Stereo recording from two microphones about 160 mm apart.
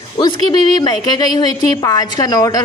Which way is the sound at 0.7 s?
25° left (ahead or behind).